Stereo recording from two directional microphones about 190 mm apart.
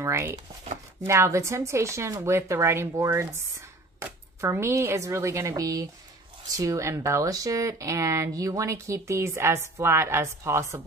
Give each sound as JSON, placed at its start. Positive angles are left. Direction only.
{"t": 0.0, "sound": "speech", "side_deg": -15}
{"t": 4.4, "sound": "speech", "side_deg": -15}